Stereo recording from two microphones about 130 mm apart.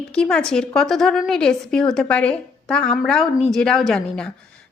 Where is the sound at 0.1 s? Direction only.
5° left (ahead or behind).